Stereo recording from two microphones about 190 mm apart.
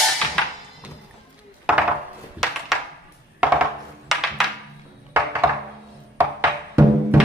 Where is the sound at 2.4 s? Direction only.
Centre (ahead or behind).